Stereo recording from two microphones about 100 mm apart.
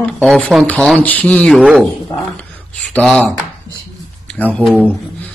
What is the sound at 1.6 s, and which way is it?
Speech, 5° right (ahead or behind).